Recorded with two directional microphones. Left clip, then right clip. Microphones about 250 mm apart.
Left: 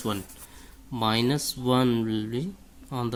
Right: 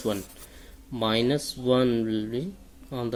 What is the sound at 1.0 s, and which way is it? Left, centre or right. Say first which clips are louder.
Speech: right 1 dB; left.